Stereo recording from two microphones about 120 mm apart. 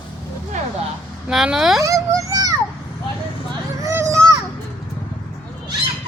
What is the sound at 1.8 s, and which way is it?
Children playing, 25° right (ahead or behind).